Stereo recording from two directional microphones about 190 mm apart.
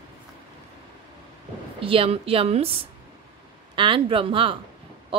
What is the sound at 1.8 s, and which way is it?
A woman's voice, 30° right (ahead or behind).